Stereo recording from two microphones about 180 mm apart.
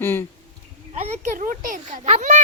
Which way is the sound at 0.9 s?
45° right (ahead or behind).